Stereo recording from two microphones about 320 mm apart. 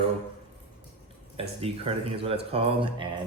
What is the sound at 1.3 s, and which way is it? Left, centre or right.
Speech, centre.